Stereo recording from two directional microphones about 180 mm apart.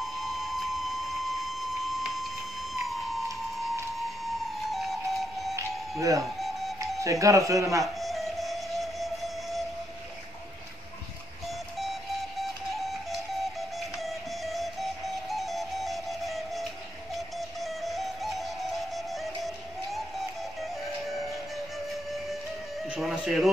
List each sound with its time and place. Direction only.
0.0 s a sound: centre (ahead or behind)
4.5 s music: centre (ahead or behind)
5.6 s music: 15° right (ahead or behind)
6.4 s music: centre (ahead or behind)
7.0 s speech: 15° right (ahead or behind)
7.8 s music: centre (ahead or behind)
11.4 s music: centre (ahead or behind)